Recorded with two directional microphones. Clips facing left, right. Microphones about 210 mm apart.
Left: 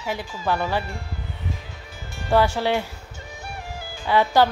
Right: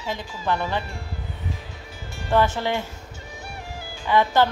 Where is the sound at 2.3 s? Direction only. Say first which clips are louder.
Left 2 dB; 10° left (ahead or behind).